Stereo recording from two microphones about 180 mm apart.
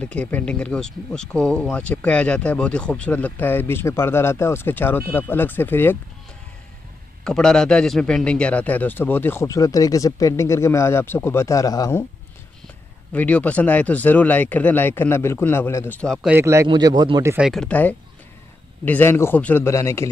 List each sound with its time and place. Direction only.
0.0 s speech: 5° left (ahead or behind)
7.2 s speech: 5° left (ahead or behind)
13.1 s speech: 10° left (ahead or behind)
16.3 s a man's voice: 15° right (ahead or behind)
16.6 s a man's voice: 25° right (ahead or behind)
17.3 s speech: 5° right (ahead or behind); by 20.1 s 15° left (ahead or behind)